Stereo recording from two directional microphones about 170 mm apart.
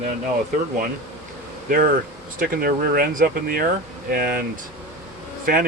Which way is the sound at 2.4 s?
60° right (ahead or behind).